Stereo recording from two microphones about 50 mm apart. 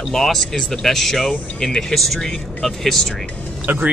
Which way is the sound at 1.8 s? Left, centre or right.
Centre.